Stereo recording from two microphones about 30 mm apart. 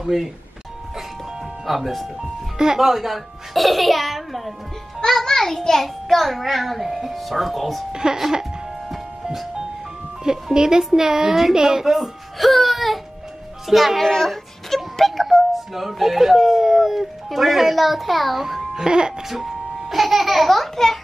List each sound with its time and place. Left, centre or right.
0.0 s speech: centre
1.7 s a child's voice: centre
5.2 s a child's voice: centre
7.9 s a child's voice: right
8.8 s music: centre
10.3 s a child's voice: right
11.8 s speech: centre
12.4 s music: centre
13.7 s a child's voice: centre
14.0 s a sound: centre
15.5 s music: centre
15.9 s a child's voice: centre
18.8 s a child's voice: right
19.2 s a child's voice: centre